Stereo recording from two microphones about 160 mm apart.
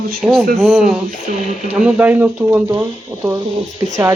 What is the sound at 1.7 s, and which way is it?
Speech, 10° right (ahead or behind).